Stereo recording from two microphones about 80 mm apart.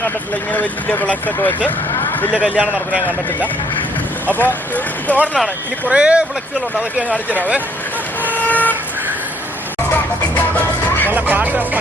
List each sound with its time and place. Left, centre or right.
0.5 s speech: centre
2.3 s a man's voice: centre
4.3 s speech: left
5.8 s a man's voice: centre
8.2 s vehicle: left
9.9 s music: left
11.1 s speech: right